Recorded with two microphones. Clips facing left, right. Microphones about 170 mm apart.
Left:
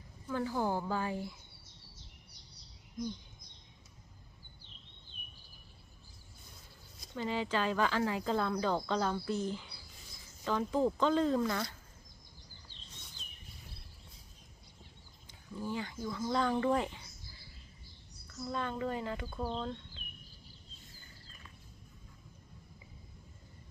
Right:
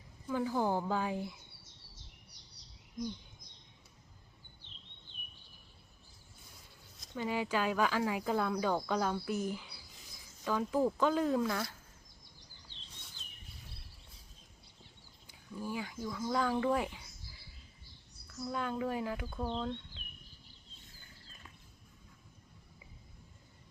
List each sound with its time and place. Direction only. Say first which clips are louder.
0.3 s speech: right 1 dB; 10° right (ahead or behind)
7.0 s a sound: even; centre (ahead or behind)
7.3 s speech: even; 10° right (ahead or behind)
15.3 s speech: left 1 dB; 10° right (ahead or behind)
18.4 s speech: even; 5° right (ahead or behind)